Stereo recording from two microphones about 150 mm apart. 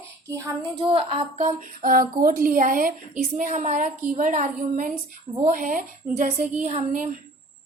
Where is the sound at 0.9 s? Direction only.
40° right (ahead or behind).